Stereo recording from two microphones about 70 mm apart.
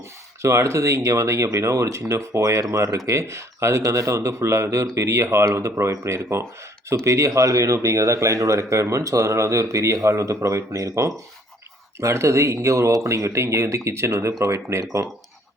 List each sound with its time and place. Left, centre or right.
0.4 s speech: right